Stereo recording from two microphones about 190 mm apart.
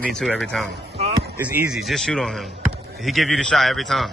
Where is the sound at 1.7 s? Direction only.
Centre (ahead or behind).